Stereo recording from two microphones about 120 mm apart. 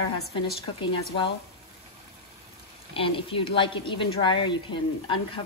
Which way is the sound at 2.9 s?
50° left (ahead or behind).